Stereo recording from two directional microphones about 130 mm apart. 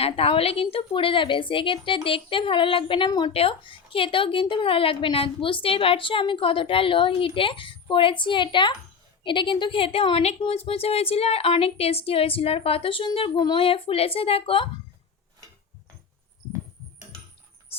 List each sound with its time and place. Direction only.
0.0 s a woman's voice: 50° left (ahead or behind)
3.3 s speech: 45° left (ahead or behind)